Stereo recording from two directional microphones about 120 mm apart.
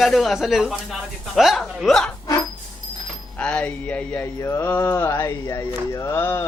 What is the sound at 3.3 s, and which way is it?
Speech, 10° left (ahead or behind).